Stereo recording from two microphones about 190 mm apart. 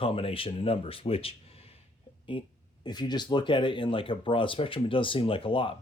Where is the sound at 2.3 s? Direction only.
25° left (ahead or behind).